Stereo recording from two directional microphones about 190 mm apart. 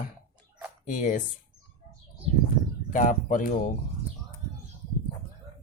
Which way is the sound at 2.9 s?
45° left (ahead or behind).